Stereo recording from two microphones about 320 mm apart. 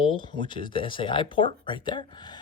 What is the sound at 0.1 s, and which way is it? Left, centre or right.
Speech, centre.